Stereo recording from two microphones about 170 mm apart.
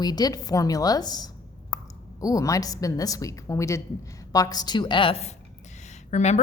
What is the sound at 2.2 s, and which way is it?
A woman's voice, 20° left (ahead or behind).